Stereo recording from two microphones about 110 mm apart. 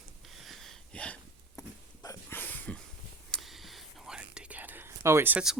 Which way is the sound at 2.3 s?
15° left (ahead or behind).